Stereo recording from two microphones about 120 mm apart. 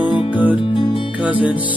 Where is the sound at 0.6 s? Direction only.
45° left (ahead or behind).